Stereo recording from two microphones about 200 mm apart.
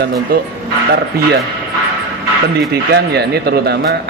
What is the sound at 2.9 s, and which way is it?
A man's voice, 55° right (ahead or behind).